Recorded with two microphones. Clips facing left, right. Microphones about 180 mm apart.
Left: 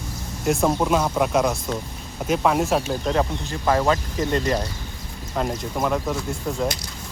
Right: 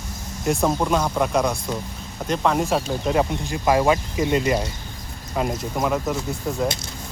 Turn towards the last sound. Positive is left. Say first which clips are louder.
# right 1 dB
turn(degrees=0)  # may be behind; listen again after turning